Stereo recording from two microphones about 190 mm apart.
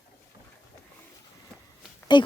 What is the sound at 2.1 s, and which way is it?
Speech, 25° left (ahead or behind).